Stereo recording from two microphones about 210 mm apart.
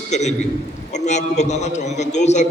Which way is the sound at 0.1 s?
35° left (ahead or behind).